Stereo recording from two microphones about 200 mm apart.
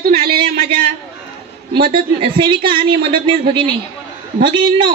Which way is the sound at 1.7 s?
25° right (ahead or behind).